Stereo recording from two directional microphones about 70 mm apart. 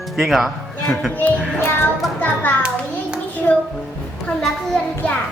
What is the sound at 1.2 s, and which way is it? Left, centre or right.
Music, left.